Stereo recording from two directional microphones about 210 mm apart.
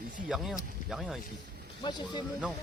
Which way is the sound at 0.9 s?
Centre (ahead or behind).